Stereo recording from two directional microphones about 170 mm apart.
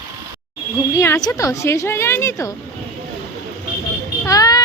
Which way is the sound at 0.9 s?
15° left (ahead or behind).